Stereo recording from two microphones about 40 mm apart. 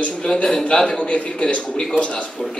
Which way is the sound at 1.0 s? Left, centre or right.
Left.